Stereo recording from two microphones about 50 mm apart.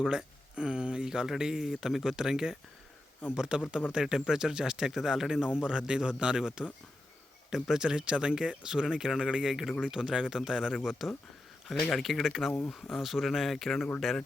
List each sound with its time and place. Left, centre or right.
0.0 s speech: centre